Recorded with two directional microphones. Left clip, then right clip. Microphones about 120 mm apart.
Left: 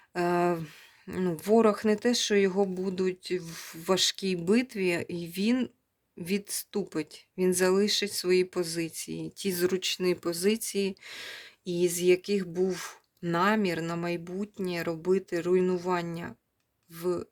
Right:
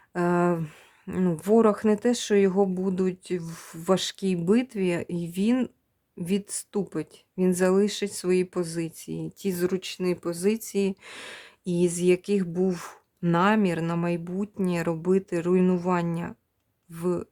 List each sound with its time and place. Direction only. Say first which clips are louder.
0.1 s speech: right 2 dB; 35° right (ahead or behind)